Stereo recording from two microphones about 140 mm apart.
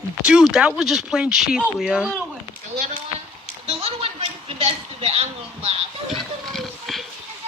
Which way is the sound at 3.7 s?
45° right (ahead or behind).